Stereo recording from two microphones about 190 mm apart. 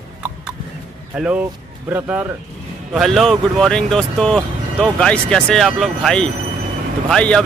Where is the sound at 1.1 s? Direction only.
5° right (ahead or behind).